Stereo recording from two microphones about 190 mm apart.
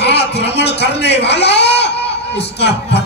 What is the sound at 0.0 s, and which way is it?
Speech, 65° left (ahead or behind).